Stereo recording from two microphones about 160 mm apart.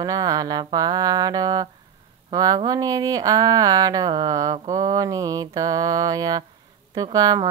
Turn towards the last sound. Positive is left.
turn(degrees=-25)  # may be behind; listen again after turning